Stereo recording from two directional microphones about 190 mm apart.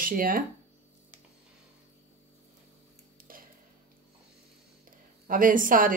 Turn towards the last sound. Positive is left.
turn(degrees=-45)  # may be behind; listen again after turning